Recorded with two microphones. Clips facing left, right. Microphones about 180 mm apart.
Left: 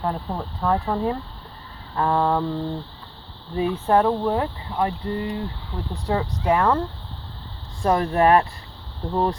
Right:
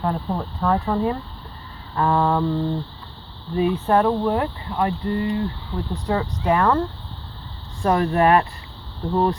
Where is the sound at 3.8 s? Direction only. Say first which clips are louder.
Left 2 dB; 20° left (ahead or behind).